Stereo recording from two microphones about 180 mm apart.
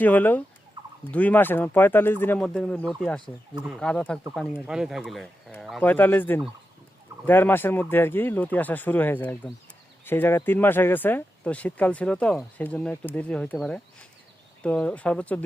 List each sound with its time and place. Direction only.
0.0 s speech: 10° left (ahead or behind)
0.8 s fowl: 20° right (ahead or behind)
1.1 s speech: 10° left (ahead or behind)
3.5 s speech: 5° right (ahead or behind)
3.8 s speech: 5° left (ahead or behind)